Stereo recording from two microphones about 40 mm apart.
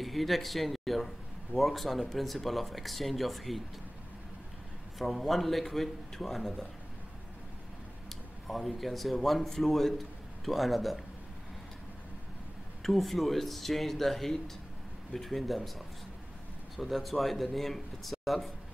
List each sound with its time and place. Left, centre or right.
0.0 s a man's voice: centre
4.9 s a man's voice: centre
8.1 s speech: centre
12.8 s a man's voice: centre
16.7 s a man's voice: centre